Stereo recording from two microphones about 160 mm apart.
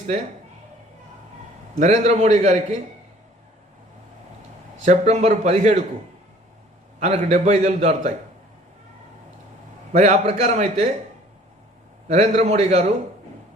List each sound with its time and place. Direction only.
1.7 s a man's voice: 50° right (ahead or behind)
4.9 s a man's voice: 45° right (ahead or behind)
7.0 s a man's voice: 45° right (ahead or behind)
9.9 s a man's voice: 45° right (ahead or behind)
12.0 s a man's voice: 45° right (ahead or behind)